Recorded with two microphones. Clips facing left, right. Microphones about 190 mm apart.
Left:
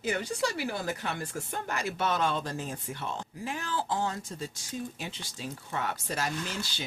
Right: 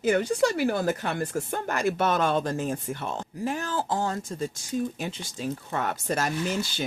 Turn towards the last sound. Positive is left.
turn(degrees=-10)  # may be behind; listen again after turning